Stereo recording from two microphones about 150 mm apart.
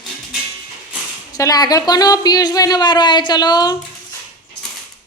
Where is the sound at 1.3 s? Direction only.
25° left (ahead or behind).